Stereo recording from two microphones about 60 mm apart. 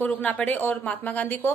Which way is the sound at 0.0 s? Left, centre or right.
Left.